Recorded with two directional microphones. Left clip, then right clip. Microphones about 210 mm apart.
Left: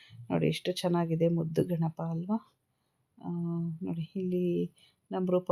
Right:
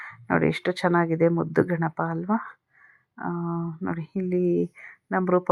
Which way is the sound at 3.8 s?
10° right (ahead or behind).